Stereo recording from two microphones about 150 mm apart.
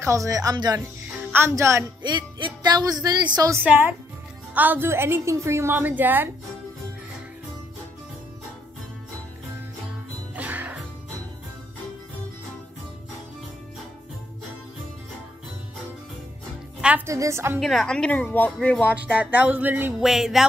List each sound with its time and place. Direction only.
0.0 s a woman's voice: 20° right (ahead or behind)
2.0 s speech: 30° right (ahead or behind)
4.6 s a woman's voice: 15° right (ahead or behind)
10.3 s music: 10° right (ahead or behind)
16.8 s music: 10° right (ahead or behind)
17.1 s speech: 20° right (ahead or behind)
17.6 s speech: centre (ahead or behind)
19.1 s a woman's voice: 10° right (ahead or behind)